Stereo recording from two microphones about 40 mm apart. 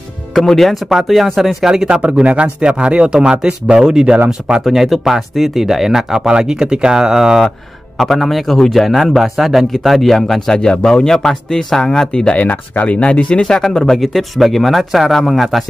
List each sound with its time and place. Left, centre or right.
0.3 s a man's voice: centre
1.7 s speech: right
4.6 s speech: centre
8.0 s a man's voice: centre; by 12.4 s left
12.4 s speech: left
13.4 s a man's voice: centre